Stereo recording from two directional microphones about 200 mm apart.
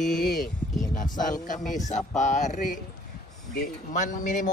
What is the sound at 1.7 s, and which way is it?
Speech, 35° left (ahead or behind).